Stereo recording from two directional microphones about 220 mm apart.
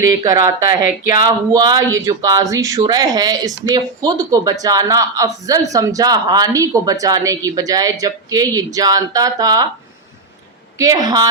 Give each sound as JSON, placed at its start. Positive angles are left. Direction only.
{"t": 0.0, "sound": "speech", "side_deg": -15}
{"t": 10.8, "sound": "speech", "side_deg": -15}